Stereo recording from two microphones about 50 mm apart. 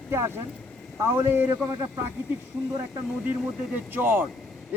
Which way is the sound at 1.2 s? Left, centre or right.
Right.